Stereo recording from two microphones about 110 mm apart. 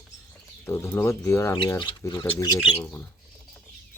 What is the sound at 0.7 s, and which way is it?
Speech, 25° left (ahead or behind).